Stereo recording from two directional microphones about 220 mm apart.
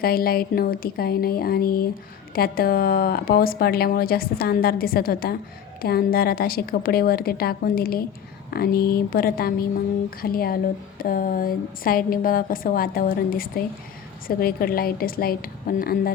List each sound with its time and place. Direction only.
0.0 s speech: 45° left (ahead or behind)